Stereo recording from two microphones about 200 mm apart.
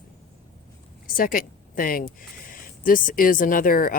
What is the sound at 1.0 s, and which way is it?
Speech, 45° left (ahead or behind).